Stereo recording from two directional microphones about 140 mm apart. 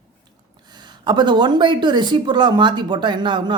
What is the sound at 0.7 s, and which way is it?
Speech, 30° right (ahead or behind).